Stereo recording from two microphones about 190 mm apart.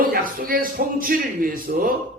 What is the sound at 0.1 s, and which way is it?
Speech, 50° right (ahead or behind).